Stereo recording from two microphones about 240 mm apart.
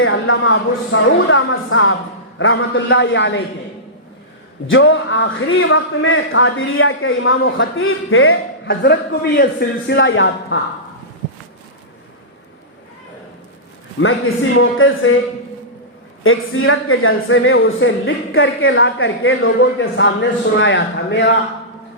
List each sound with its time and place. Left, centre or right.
0.0 s a sound: left
0.9 s a man's voice: left
4.6 s a man's voice: left
8.7 s a man's voice: left
14.0 s a man's voice: left
16.2 s a man's voice: left